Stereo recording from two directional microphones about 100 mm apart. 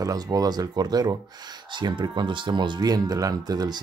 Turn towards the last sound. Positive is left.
turn(degrees=-40)  # may be behind; listen again after turning